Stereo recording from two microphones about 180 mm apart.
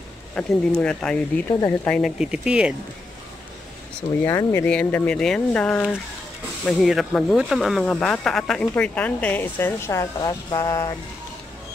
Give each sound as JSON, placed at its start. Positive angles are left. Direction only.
{"t": 0.3, "sound": "speech", "side_deg": 5}
{"t": 4.2, "sound": "speech", "side_deg": 15}